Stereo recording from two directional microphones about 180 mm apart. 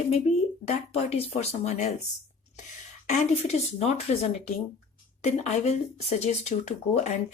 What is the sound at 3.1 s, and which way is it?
Speech, 35° left (ahead or behind).